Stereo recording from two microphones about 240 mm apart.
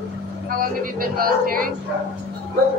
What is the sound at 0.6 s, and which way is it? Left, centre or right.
Speech, right.